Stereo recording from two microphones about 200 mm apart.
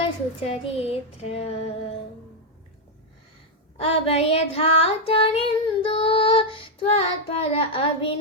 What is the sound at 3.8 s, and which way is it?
Child singing, 30° left (ahead or behind).